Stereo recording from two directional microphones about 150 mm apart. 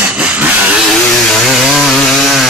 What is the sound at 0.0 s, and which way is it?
Vehicle, 10° right (ahead or behind).